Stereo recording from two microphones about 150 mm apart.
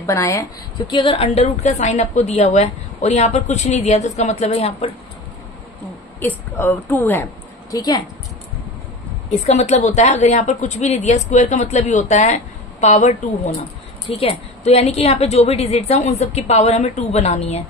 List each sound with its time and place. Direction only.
0.0 s speech: 20° left (ahead or behind)
0.8 s a woman's voice: 35° left (ahead or behind)
6.1 s a woman's voice: 15° left (ahead or behind)
7.7 s speech: 25° left (ahead or behind)
9.3 s a woman's voice: 50° left (ahead or behind)